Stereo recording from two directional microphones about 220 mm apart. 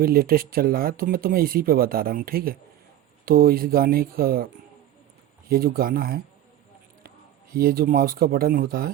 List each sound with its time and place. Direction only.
0.0 s speech: 40° right (ahead or behind)
5.5 s speech: 45° right (ahead or behind)
7.5 s speech: 40° right (ahead or behind)